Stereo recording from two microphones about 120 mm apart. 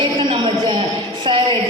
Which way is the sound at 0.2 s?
45° right (ahead or behind).